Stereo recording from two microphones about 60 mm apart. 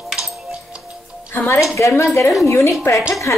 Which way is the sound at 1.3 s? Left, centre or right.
Left.